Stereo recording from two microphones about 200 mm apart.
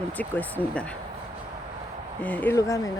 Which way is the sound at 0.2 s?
10° left (ahead or behind).